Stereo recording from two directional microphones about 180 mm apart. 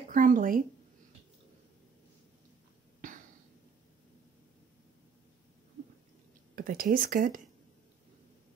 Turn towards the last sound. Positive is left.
turn(degrees=-50)  # may be behind; listen again after turning